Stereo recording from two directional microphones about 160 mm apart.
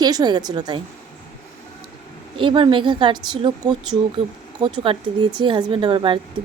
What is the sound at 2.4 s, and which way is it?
Speech, 30° right (ahead or behind).